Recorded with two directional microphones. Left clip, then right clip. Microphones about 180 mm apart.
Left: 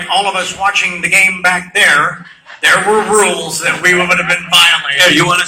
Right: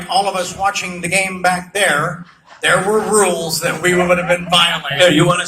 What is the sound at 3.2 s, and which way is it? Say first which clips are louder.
A man's voice: left 3 dB; 55° right (ahead or behind).